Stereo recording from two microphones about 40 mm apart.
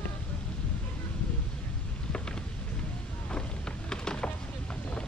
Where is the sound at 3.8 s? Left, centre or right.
Left.